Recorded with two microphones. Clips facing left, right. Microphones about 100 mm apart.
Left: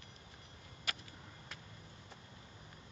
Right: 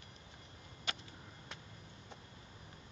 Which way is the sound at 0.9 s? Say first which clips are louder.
Right 1 dB; 25° right (ahead or behind).